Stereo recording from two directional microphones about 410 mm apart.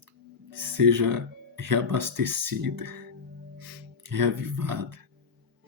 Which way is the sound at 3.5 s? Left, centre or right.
Right.